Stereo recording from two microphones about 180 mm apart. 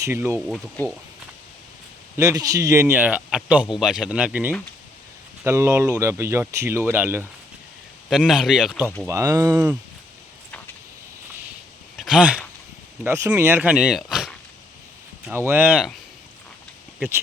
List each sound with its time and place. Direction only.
0.0 s speech: 15° right (ahead or behind)
0.3 s speech: centre (ahead or behind)
2.1 s speech: 20° right (ahead or behind)
8.1 s speech: centre (ahead or behind)
9.0 s speech: 15° right (ahead or behind)
11.9 s a sound: centre (ahead or behind)
13.1 s speech: 15° right (ahead or behind)
15.3 s speech: 10° right (ahead or behind)